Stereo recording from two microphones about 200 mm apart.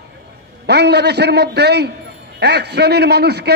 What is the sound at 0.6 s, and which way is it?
A man's voice, 55° right (ahead or behind).